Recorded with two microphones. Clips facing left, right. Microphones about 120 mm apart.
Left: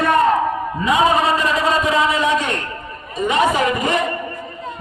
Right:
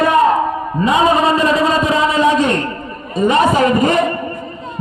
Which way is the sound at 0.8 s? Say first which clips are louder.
Right 3 dB; 30° right (ahead or behind).